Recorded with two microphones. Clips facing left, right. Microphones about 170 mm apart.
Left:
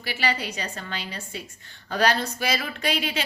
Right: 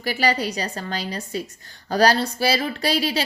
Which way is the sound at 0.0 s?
40° right (ahead or behind).